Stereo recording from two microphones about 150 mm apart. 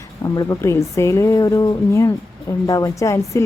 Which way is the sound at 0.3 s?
20° left (ahead or behind).